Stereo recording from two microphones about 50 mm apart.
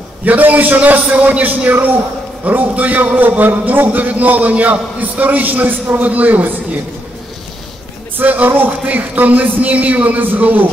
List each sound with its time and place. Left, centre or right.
0.2 s a man's voice: right
8.2 s a man's voice: right